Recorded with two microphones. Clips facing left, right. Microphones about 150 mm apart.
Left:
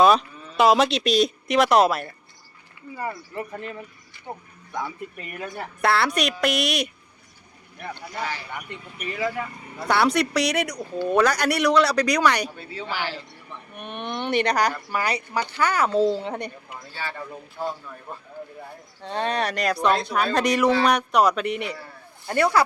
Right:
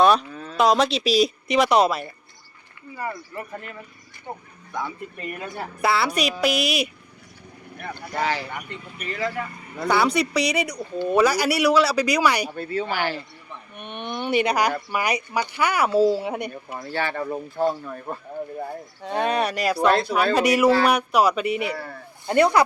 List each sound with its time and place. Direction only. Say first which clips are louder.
0.0 s cattle: even; centre (ahead or behind)
0.5 s speech: left 1 dB; centre (ahead or behind)
3.3 s speech: left 2 dB; 25° left (ahead or behind)
5.5 s speech: even; centre (ahead or behind)
8.2 s speech: right 7 dB; 90° right
8.7 s speech: even; 10° left (ahead or behind); by 12.5 s 10° right (ahead or behind)
12.5 s speech: right 6 dB; 50° right (ahead or behind)
13.7 s speech: even; centre (ahead or behind)
16.7 s a man's voice: right 11 dB; 70° right (ahead or behind)
19.0 s speech: right 2 dB; 10° right (ahead or behind)
21.7 s a man's voice: right 5 dB; 60° right (ahead or behind)
22.3 s speech: right 3 dB; 20° right (ahead or behind)